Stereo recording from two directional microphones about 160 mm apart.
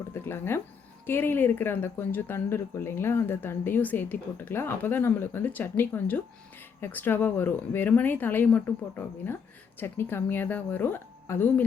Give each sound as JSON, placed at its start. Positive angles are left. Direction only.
{"t": 0.1, "sound": "speech", "side_deg": 15}